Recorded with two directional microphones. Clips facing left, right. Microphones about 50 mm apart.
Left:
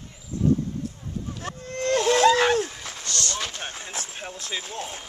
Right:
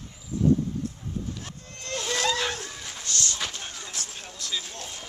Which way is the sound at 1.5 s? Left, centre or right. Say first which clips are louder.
Left 12 dB; left.